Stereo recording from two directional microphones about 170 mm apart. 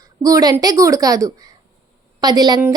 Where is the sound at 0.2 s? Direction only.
20° right (ahead or behind).